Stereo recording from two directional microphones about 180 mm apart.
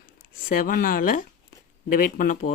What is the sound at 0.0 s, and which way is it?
Speech, 50° left (ahead or behind).